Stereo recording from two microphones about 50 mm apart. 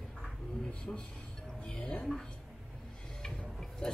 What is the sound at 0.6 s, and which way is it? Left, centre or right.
Speech, centre.